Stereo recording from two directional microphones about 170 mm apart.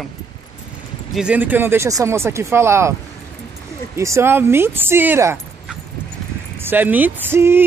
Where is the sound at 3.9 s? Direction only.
15° right (ahead or behind).